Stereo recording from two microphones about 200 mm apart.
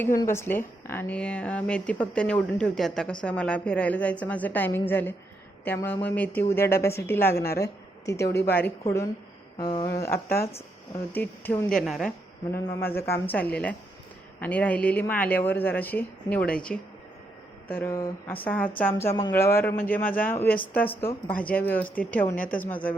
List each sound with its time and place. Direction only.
0.0 s a woman's voice: 15° left (ahead or behind)
9.6 s a woman's voice: 20° left (ahead or behind); by 12.1 s centre (ahead or behind)
12.6 s a woman's voice: 10° left (ahead or behind)